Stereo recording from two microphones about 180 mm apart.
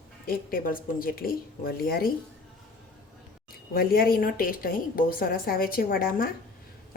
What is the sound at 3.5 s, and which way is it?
A woman's voice, 55° left (ahead or behind).